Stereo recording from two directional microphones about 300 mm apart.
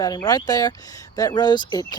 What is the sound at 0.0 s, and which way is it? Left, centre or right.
Speech, centre.